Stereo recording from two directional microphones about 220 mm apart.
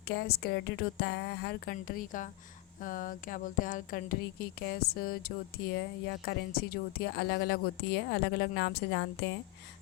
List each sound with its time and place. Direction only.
0.1 s speech: 45° left (ahead or behind)